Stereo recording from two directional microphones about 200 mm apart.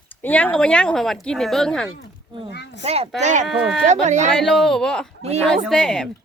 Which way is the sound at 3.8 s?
35° right (ahead or behind).